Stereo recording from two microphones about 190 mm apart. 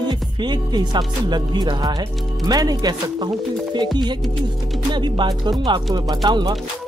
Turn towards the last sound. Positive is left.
turn(degrees=-25)  # may be behind; listen again after turning